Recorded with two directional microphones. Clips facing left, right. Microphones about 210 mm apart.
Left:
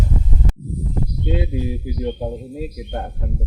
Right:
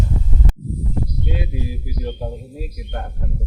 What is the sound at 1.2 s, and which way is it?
Speech, 25° left (ahead or behind).